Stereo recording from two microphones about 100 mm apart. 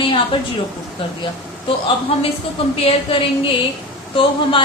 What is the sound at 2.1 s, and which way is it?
Speech, 70° left (ahead or behind).